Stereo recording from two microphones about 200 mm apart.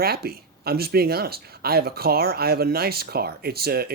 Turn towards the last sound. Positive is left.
turn(degrees=-50)  # may be behind; listen again after turning